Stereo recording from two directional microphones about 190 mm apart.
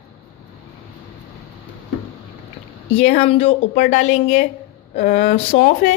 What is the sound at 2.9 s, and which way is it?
Speech, 35° left (ahead or behind).